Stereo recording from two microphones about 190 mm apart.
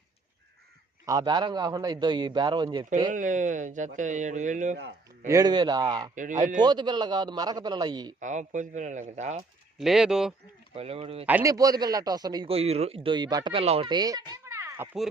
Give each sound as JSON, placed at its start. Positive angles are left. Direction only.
{"t": 1.0, "sound": "a man's voice", "side_deg": -20}
{"t": 3.1, "sound": "speech", "side_deg": -40}
{"t": 5.3, "sound": "a man's voice", "side_deg": -20}
{"t": 8.2, "sound": "speech", "side_deg": -40}
{"t": 9.7, "sound": "speech", "side_deg": 0}
{"t": 10.8, "sound": "speech", "side_deg": -30}
{"t": 11.3, "sound": "a man's voice", "side_deg": -15}